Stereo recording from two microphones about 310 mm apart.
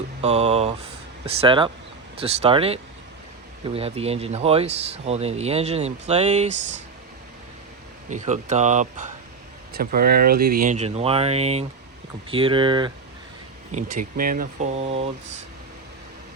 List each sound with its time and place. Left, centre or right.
0.2 s speech: centre
8.1 s speech: right
14.0 s speech: right